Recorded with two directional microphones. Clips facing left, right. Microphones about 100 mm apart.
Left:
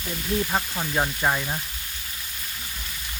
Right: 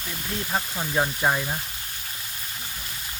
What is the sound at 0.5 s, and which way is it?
Speech, centre (ahead or behind).